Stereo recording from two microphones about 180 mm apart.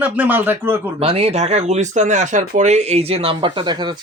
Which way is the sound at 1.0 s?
35° right (ahead or behind).